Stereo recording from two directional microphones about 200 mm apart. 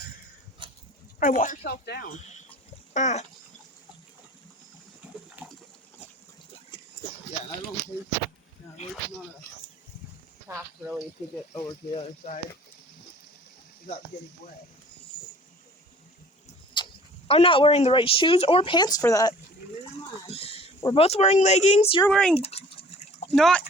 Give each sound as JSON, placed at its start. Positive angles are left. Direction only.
{"t": 0.6, "sound": "goat", "side_deg": -25}
{"t": 1.2, "sound": "speech", "side_deg": 40}
{"t": 5.4, "sound": "water", "side_deg": -10}
{"t": 10.5, "sound": "speech", "side_deg": -5}
{"t": 11.5, "sound": "speech", "side_deg": 15}
{"t": 11.9, "sound": "speech", "side_deg": 35}
{"t": 16.8, "sound": "a sound", "side_deg": 20}
{"t": 17.2, "sound": "speech", "side_deg": 30}
{"t": 20.2, "sound": "speech", "side_deg": 30}
{"t": 22.1, "sound": "speech", "side_deg": 5}
{"t": 22.4, "sound": "a sound", "side_deg": 30}
{"t": 23.3, "sound": "speech", "side_deg": 5}